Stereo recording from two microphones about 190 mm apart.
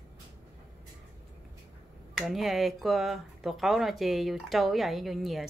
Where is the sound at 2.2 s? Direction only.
Centre (ahead or behind).